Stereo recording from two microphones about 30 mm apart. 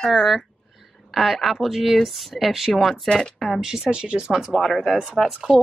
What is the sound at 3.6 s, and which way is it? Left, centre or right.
Speech, centre.